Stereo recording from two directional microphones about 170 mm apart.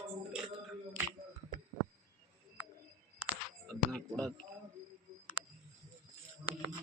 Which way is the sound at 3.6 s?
5° left (ahead or behind).